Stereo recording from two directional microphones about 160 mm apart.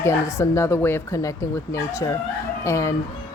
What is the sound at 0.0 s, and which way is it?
A woman's voice, 15° left (ahead or behind).